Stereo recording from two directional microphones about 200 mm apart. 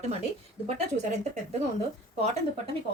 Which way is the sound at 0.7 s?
35° right (ahead or behind).